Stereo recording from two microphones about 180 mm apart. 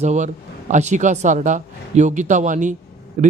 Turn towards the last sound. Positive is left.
turn(degrees=-45)  # may be behind; listen again after turning